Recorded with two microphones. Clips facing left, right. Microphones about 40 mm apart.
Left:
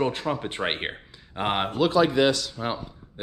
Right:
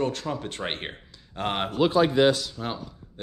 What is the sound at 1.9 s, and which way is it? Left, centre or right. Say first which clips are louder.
Speech: even; left.